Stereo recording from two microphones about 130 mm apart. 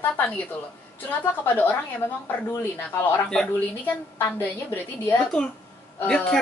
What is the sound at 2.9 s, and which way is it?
Speech, 20° left (ahead or behind).